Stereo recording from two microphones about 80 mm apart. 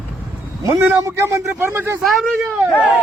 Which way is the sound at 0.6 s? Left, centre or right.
Right.